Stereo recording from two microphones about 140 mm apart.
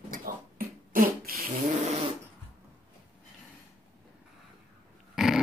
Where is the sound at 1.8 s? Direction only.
50° right (ahead or behind).